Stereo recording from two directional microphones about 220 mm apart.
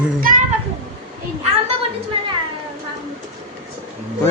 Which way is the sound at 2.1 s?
25° right (ahead or behind).